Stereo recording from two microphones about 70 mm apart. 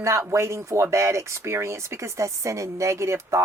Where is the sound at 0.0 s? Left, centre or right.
Right.